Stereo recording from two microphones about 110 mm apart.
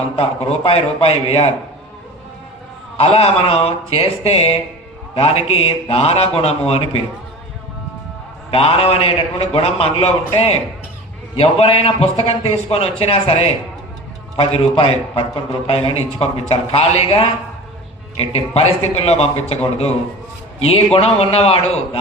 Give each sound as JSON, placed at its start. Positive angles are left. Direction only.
{"t": 0.2, "sound": "a man's voice", "side_deg": 70}
{"t": 3.0, "sound": "a man's voice", "side_deg": 60}
{"t": 8.4, "sound": "a man's voice", "side_deg": 65}